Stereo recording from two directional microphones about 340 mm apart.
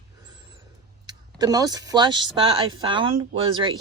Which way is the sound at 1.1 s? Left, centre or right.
Centre.